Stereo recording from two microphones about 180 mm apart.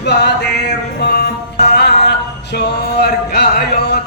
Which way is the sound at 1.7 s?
65° left (ahead or behind).